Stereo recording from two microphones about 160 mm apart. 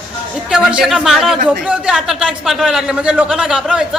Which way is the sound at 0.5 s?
5° right (ahead or behind).